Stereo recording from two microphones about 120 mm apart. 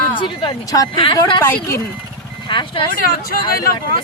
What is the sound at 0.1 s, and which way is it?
A woman's voice, 45° left (ahead or behind).